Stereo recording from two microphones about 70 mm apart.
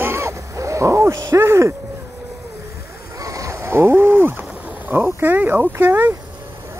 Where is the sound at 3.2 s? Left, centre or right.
Right.